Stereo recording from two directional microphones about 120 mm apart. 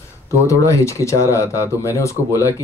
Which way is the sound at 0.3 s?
25° left (ahead or behind).